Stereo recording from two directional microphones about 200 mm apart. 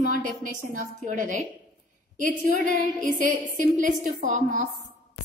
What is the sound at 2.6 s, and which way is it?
A woman's voice, 40° right (ahead or behind).